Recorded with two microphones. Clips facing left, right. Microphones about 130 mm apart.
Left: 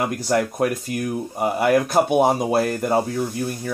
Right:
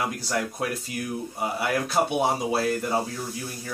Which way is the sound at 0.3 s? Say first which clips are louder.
Left 11 dB; 55° left (ahead or behind).